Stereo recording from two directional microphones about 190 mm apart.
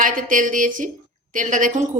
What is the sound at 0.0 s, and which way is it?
A woman's voice, 45° right (ahead or behind).